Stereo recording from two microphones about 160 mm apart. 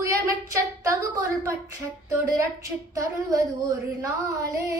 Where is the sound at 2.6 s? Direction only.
20° right (ahead or behind).